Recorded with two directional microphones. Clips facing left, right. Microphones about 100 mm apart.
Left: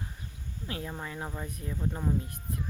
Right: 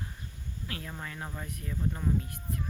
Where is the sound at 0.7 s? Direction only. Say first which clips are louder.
Left 4 dB; 20° left (ahead or behind).